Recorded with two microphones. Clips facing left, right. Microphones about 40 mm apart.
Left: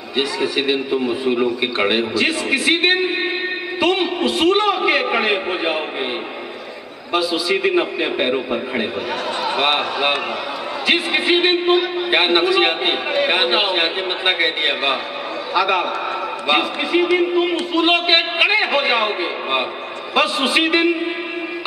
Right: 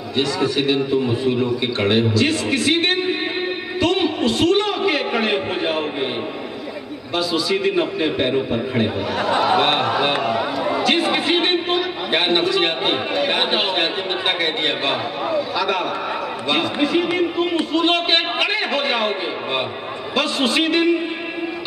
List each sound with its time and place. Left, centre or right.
0.1 s a man's voice: centre
7.2 s a man's voice: centre